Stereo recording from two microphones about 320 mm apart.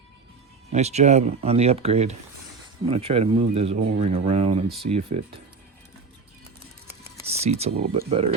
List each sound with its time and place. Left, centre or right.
0.7 s speech: right
7.3 s speech: centre